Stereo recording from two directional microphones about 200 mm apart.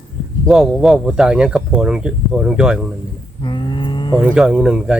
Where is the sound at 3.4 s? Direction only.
25° left (ahead or behind).